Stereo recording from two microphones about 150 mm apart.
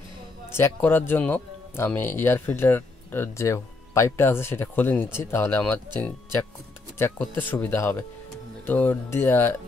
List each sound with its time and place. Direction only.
0.5 s a man's voice: 15° left (ahead or behind)